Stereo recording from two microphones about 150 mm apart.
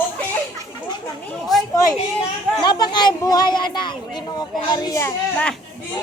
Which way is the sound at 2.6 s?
30° left (ahead or behind).